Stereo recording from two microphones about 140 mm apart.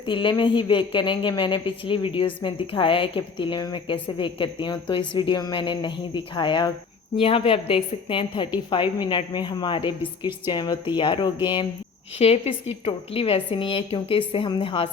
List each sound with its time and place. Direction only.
0.0 s a woman's voice: 35° left (ahead or behind)
12.2 s a woman's voice: 45° left (ahead or behind)